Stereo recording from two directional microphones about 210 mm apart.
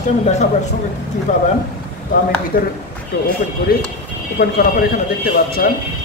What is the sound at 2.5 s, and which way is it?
Speech, 45° left (ahead or behind).